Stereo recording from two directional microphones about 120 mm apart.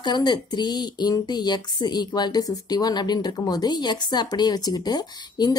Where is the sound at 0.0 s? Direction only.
40° left (ahead or behind).